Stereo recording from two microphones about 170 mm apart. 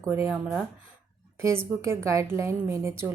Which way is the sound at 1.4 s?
15° right (ahead or behind).